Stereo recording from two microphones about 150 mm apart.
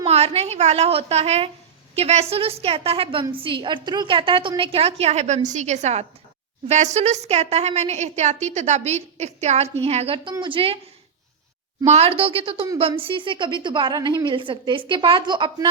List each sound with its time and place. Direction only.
0.0 s a woman's voice: 45° right (ahead or behind)
11.9 s a woman's voice: 40° right (ahead or behind)